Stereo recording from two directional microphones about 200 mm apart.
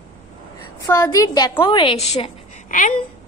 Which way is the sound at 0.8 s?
15° left (ahead or behind).